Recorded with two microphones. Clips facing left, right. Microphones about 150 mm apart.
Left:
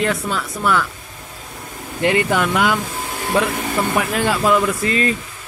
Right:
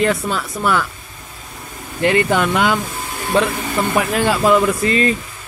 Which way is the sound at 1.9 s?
15° left (ahead or behind).